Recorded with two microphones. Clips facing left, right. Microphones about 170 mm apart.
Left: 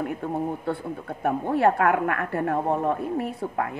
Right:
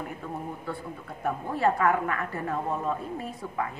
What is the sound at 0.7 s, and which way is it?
A woman's voice, 60° left (ahead or behind).